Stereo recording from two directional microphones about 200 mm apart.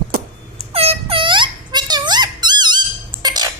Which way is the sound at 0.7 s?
30° right (ahead or behind).